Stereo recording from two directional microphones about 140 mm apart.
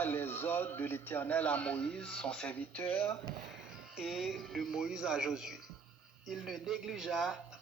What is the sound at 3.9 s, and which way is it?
Speech, 5° right (ahead or behind).